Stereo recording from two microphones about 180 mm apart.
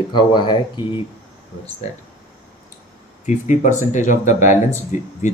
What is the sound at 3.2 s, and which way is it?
Speech, 45° left (ahead or behind).